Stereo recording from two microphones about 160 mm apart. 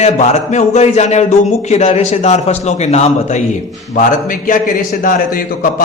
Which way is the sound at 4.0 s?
55° left (ahead or behind).